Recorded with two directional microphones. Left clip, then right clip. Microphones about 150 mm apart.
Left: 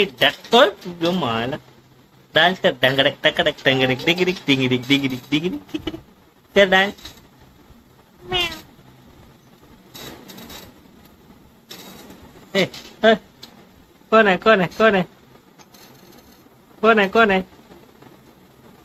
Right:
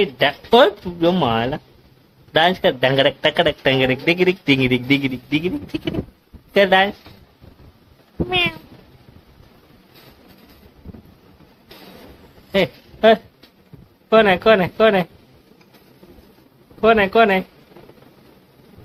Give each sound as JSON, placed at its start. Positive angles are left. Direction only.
{"t": 0.0, "sound": "speech", "side_deg": -35}
{"t": 8.3, "sound": "speech", "side_deg": -25}
{"t": 12.5, "sound": "speech", "side_deg": -25}
{"t": 16.8, "sound": "speech", "side_deg": -15}